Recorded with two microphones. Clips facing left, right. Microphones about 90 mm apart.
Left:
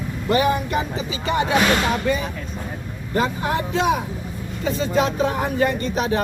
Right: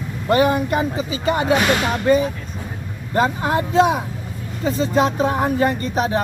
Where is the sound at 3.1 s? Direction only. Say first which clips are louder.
Right 3 dB; 35° right (ahead or behind).